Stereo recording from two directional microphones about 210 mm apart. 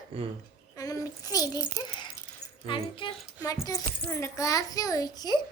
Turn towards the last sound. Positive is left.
turn(degrees=20)  # may be behind; listen again after turning